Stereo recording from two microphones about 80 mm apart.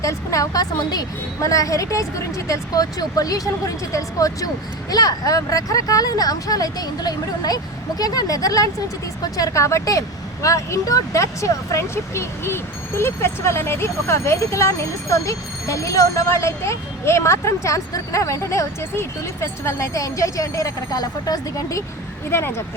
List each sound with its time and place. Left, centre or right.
0.0 s speech: left
1.4 s speech: left
22.3 s speech: left